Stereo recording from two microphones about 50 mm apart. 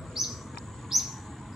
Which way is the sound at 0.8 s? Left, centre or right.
Centre.